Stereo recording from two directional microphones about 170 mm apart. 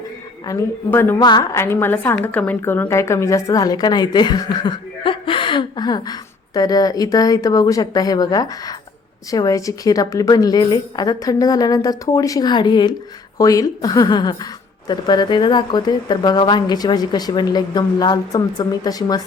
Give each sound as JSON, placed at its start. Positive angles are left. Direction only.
{"t": 0.4, "sound": "a woman's voice", "side_deg": 15}